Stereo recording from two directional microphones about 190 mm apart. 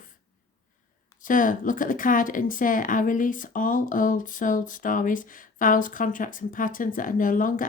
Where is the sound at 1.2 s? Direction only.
45° left (ahead or behind).